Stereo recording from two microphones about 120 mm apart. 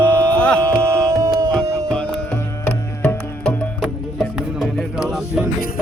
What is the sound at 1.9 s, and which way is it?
Music, 10° left (ahead or behind).